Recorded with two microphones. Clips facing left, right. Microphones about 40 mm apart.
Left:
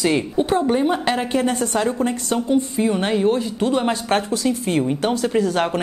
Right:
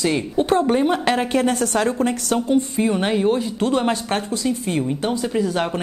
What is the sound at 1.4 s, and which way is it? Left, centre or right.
Speech, centre.